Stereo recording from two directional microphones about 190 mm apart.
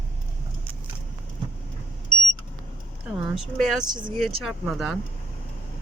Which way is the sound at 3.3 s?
Centre (ahead or behind).